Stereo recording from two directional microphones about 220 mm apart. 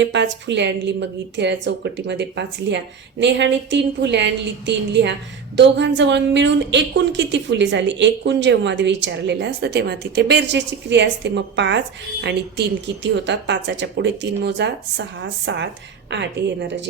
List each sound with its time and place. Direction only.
0.0 s a woman's voice: 55° right (ahead or behind)